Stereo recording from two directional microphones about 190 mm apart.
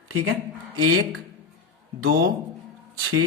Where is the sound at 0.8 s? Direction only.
90° right.